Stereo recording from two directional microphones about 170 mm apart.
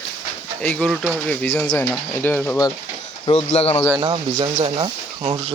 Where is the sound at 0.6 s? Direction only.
5° left (ahead or behind).